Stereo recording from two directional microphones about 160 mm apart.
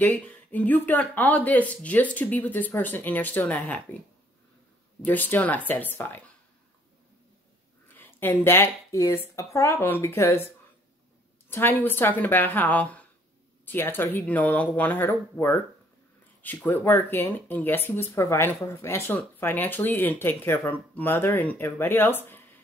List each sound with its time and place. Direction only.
0.0 s speech: 10° left (ahead or behind)
5.0 s speech: 10° left (ahead or behind)
7.9 s speech: 10° left (ahead or behind)